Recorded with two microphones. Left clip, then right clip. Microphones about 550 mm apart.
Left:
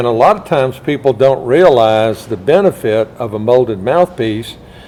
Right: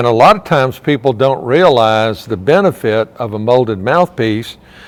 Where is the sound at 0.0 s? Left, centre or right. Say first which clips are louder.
Right 2 dB; right.